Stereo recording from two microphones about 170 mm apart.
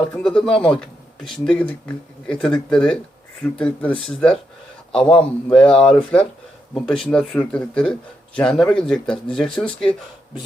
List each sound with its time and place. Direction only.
0.2 s speech: 5° left (ahead or behind)